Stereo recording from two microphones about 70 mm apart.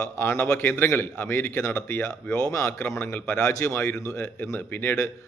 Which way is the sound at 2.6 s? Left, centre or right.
Left.